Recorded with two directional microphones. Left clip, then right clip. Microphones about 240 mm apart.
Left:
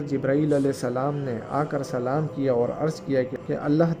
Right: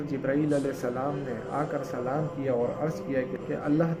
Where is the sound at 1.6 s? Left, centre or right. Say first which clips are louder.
Left 5 dB; left.